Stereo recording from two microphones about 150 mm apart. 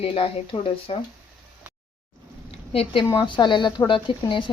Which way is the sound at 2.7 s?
35° left (ahead or behind).